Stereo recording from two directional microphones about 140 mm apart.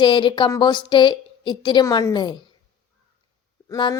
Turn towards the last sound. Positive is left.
turn(degrees=30)  # may be behind; listen again after turning